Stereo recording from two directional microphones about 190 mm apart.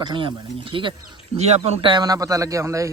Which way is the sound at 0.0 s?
25° right (ahead or behind).